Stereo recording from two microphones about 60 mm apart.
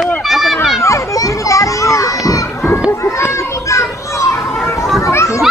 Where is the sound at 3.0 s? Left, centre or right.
Left.